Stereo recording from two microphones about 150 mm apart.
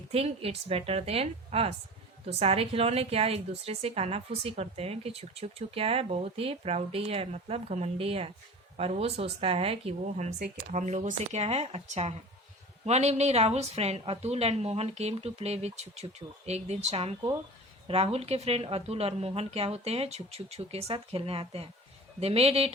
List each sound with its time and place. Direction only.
0.1 s a woman's voice: 40° right (ahead or behind)